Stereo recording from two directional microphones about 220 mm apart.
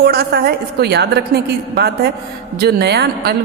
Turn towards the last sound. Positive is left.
turn(degrees=-45)  # may be behind; listen again after turning